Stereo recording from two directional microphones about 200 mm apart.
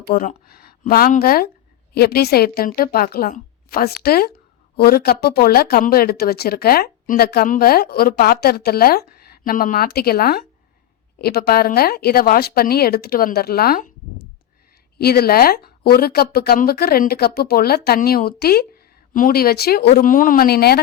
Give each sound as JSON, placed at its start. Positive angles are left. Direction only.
{"t": 0.1, "sound": "speech", "side_deg": 50}